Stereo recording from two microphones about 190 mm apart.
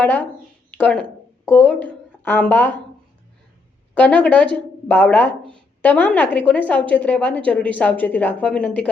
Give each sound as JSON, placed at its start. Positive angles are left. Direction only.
{"t": 0.0, "sound": "a woman's voice", "side_deg": 10}
{"t": 3.9, "sound": "a woman's voice", "side_deg": 5}
{"t": 5.4, "sound": "speech", "side_deg": -25}
{"t": 5.8, "sound": "a woman's voice", "side_deg": 10}